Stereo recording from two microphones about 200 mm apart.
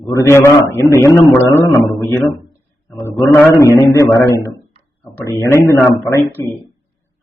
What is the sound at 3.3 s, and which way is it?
A man's voice, 15° left (ahead or behind).